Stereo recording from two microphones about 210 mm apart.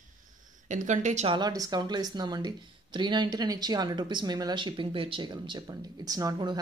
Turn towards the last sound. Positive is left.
turn(degrees=-20)  # may be behind; listen again after turning